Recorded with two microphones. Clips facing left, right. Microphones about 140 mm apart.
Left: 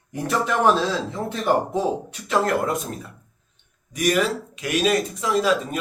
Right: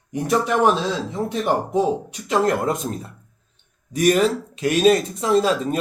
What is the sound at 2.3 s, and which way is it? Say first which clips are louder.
Speech: right 2 dB; 25° right (ahead or behind).